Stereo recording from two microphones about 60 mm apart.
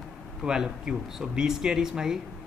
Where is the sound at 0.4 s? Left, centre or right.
Centre.